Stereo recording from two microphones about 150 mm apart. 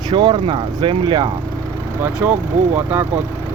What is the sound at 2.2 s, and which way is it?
Speech, 15° right (ahead or behind).